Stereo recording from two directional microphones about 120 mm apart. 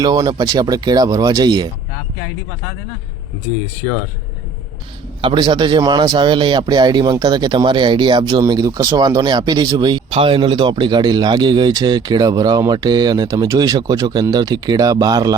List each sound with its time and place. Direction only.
0.0 s a man's voice: 35° right (ahead or behind)
5.2 s a man's voice: 40° right (ahead or behind)
10.1 s a man's voice: 50° right (ahead or behind); by 15.4 s 30° right (ahead or behind)